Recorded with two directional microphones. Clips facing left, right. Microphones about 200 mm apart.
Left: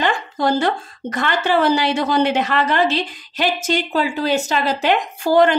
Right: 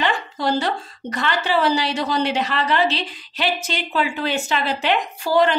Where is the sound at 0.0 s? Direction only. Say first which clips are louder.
Left 3 dB; 50° left (ahead or behind).